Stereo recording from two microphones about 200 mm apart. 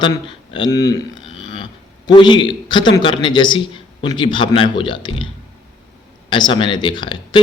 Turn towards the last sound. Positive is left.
turn(degrees=20)  # may be behind; listen again after turning